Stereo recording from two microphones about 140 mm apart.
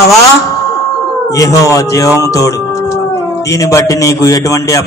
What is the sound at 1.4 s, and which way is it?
Speech, 25° left (ahead or behind).